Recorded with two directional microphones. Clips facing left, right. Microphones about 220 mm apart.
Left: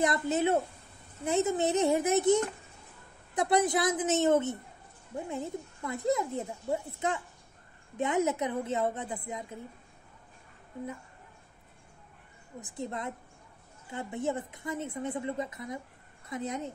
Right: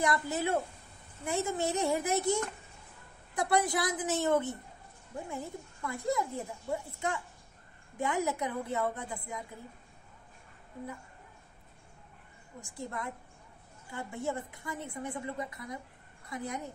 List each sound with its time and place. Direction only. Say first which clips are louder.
0.0 s a woman's voice: left 4 dB; 20° left (ahead or behind)
12.5 s a woman's voice: left 3 dB; 20° left (ahead or behind)